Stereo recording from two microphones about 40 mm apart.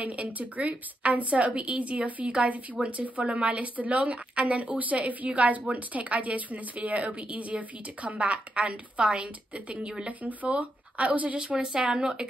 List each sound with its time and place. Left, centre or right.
0.0 s a woman's voice: right
10.0 s a woman's voice: right
11.3 s a woman's voice: right